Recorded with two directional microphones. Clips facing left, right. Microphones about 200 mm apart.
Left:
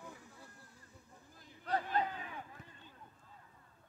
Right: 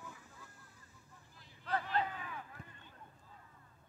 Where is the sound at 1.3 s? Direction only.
40° left (ahead or behind).